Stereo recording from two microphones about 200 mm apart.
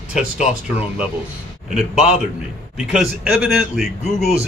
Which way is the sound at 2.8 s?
5° right (ahead or behind).